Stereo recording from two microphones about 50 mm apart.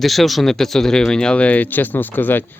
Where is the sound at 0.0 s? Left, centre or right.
Centre.